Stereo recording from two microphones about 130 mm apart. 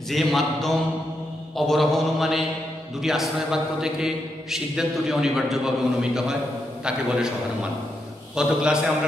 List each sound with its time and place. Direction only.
0.1 s speech: centre (ahead or behind)
8.4 s a man's voice: 5° right (ahead or behind)